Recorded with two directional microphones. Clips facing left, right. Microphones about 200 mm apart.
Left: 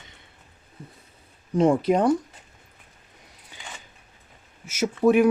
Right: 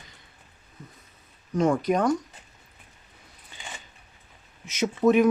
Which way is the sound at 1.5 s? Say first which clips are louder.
Left 3 dB; 30° left (ahead or behind).